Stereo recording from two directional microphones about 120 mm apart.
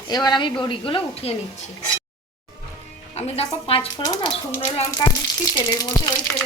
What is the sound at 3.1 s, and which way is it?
Speech, 55° left (ahead or behind).